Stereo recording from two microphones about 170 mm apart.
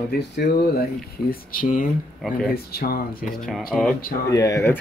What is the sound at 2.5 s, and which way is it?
Speech, 65° left (ahead or behind).